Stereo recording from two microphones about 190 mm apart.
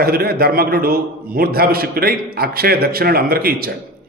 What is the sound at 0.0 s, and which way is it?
A man's voice, 55° right (ahead or behind).